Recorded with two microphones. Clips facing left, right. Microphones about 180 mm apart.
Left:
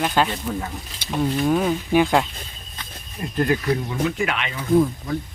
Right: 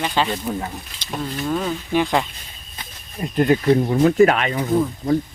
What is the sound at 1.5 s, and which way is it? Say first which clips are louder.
Speech: even; 10° left (ahead or behind).